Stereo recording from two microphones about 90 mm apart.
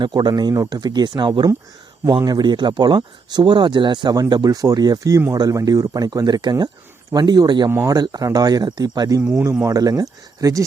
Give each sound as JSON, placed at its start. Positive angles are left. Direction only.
{"t": 0.0, "sound": "speech", "side_deg": -50}